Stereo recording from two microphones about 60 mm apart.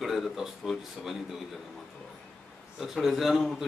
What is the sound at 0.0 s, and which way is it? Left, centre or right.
Speech, centre.